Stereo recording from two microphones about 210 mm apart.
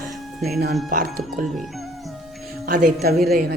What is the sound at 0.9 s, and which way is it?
Speech, 40° right (ahead or behind).